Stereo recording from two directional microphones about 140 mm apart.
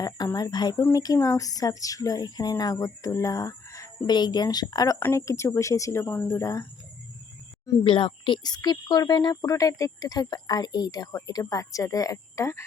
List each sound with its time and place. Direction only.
0.0 s speech: 25° left (ahead or behind)
7.9 s speech: 40° left (ahead or behind); by 12.6 s 20° left (ahead or behind)